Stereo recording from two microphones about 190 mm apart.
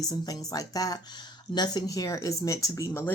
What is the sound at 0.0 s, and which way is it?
Speech, 20° left (ahead or behind).